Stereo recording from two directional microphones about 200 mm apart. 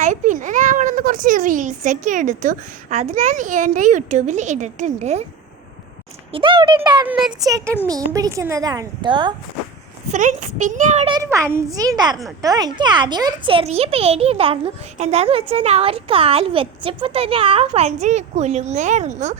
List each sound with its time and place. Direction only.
0.0 s a child's voice: 40° right (ahead or behind)
6.3 s a child's voice: 25° right (ahead or behind)
7.1 s speech: 5° right (ahead or behind)
7.4 s a woman's voice: 15° right (ahead or behind)
10.1 s a child's voice: 40° right (ahead or behind)
11.1 s a woman's voice: 15° right (ahead or behind); by 19.4 s 35° right (ahead or behind)